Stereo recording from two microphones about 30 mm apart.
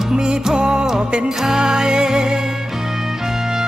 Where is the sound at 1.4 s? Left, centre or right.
Centre.